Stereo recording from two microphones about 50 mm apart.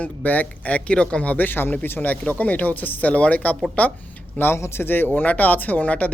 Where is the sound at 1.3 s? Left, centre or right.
Left.